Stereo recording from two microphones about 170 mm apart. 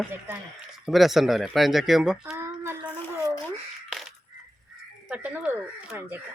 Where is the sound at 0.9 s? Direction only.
Centre (ahead or behind).